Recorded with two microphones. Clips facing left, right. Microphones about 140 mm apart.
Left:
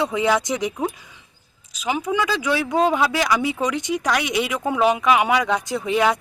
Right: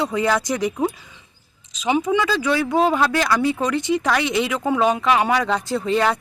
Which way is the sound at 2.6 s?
Centre (ahead or behind).